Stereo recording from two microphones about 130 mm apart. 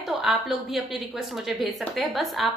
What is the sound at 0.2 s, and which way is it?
A woman's voice, 5° right (ahead or behind).